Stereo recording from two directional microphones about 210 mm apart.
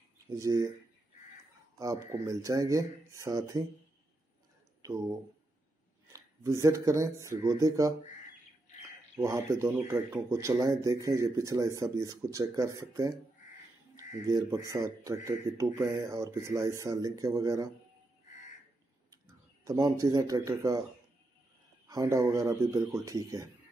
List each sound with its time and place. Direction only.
0.3 s speech: 15° right (ahead or behind)
1.8 s speech: 15° right (ahead or behind)
4.8 s speech: 15° right (ahead or behind)
6.1 s speech: 15° right (ahead or behind)
9.1 s speech: 15° right (ahead or behind)
19.6 s speech: 15° right (ahead or behind)
21.8 s speech: 15° right (ahead or behind)